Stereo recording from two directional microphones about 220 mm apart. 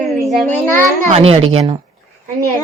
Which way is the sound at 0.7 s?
30° right (ahead or behind).